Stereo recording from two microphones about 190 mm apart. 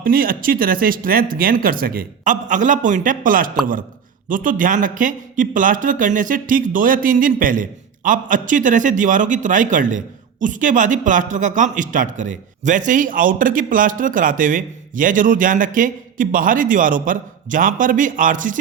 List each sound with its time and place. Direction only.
0.0 s speech: 50° right (ahead or behind)